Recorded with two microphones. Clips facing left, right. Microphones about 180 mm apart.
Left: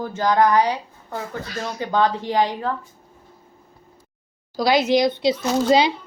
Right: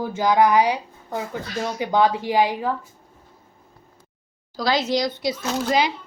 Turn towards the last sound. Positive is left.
turn(degrees=25)  # may be behind; listen again after turning